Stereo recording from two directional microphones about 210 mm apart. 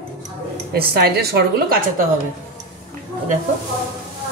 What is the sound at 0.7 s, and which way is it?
Speech, 45° right (ahead or behind).